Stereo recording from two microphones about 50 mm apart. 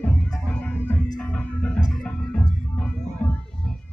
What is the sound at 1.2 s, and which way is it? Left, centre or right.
Music, left.